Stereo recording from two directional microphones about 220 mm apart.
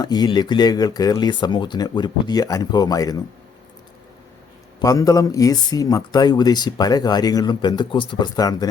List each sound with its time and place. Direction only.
0.0 s speech: 20° left (ahead or behind)
4.8 s speech: 15° left (ahead or behind)